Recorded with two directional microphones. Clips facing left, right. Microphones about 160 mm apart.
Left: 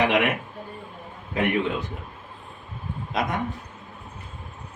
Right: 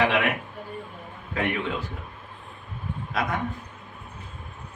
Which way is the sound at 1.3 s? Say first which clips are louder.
Left 4 dB; 20° left (ahead or behind).